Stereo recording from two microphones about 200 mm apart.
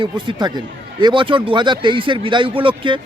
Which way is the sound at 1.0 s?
25° right (ahead or behind).